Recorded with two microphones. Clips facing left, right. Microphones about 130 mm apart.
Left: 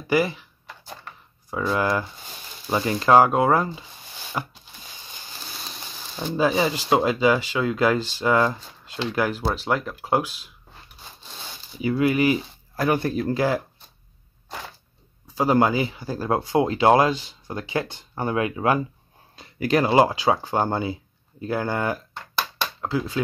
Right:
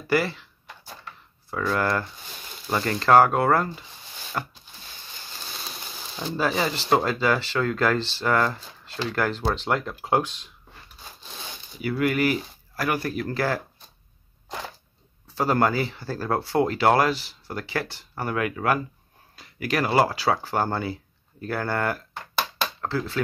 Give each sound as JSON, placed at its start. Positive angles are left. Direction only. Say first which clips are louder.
{"t": 0.1, "sound": "speech", "louder": "left 2 dB", "side_deg": 15}
{"t": 1.5, "sound": "speech", "louder": "left 2 dB", "side_deg": 15}
{"t": 6.1, "sound": "speech", "louder": "left 4 dB", "side_deg": 15}
{"t": 11.8, "sound": "speech", "louder": "left 3 dB", "side_deg": 20}
{"t": 13.3, "sound": "speech", "louder": "left 4 dB", "side_deg": 15}
{"t": 15.2, "sound": "speech", "louder": "left 3 dB", "side_deg": 15}